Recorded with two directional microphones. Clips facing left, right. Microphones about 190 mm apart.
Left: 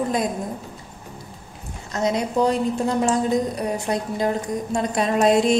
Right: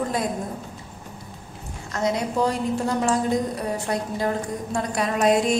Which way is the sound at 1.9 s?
20° left (ahead or behind).